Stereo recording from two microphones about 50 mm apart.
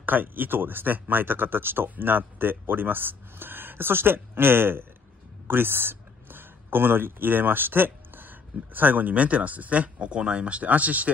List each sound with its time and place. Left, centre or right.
0.0 s speech: right